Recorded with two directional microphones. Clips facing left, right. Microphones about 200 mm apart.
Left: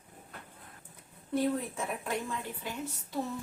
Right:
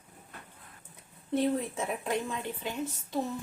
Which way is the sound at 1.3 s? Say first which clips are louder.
Right 2 dB; 25° right (ahead or behind).